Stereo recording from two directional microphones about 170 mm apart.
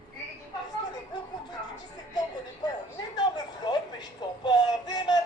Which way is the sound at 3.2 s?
25° left (ahead or behind).